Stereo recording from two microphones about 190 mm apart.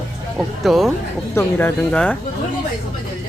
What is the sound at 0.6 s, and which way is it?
Speech, centre (ahead or behind).